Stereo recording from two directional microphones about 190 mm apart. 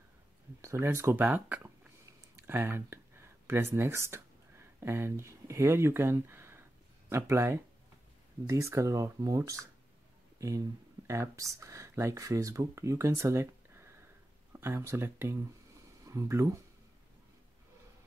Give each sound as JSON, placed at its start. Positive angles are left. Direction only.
{"t": 0.6, "sound": "speech", "side_deg": -15}